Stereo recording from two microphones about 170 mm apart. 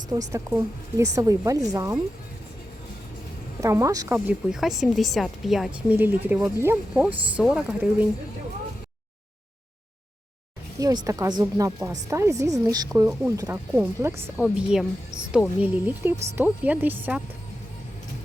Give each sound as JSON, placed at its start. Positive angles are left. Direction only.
{"t": 0.1, "sound": "speech", "side_deg": -20}
{"t": 3.6, "sound": "speech", "side_deg": -15}
{"t": 4.3, "sound": "a woman's voice", "side_deg": 0}
{"t": 10.8, "sound": "speech", "side_deg": -20}
{"t": 14.4, "sound": "a woman's voice", "side_deg": -5}